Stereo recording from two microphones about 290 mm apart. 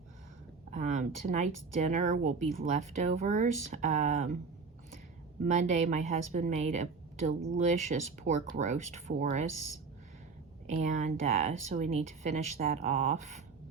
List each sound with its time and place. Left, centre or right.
0.7 s a woman's voice: right
5.5 s a woman's voice: right
10.7 s a woman's voice: right